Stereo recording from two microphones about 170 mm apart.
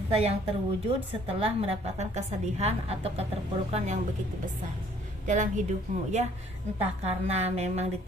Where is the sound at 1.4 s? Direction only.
35° right (ahead or behind).